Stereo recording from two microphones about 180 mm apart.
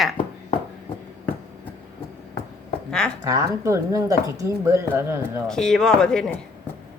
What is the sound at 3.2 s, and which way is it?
Speech, 15° right (ahead or behind).